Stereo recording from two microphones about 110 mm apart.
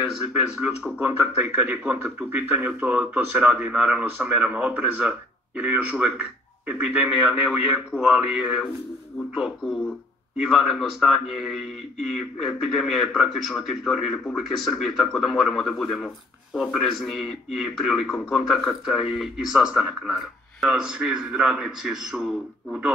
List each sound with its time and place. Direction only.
0.1 s speech: 10° right (ahead or behind)